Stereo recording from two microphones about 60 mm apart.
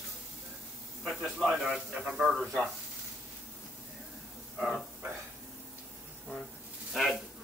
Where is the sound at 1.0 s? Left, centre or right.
Centre.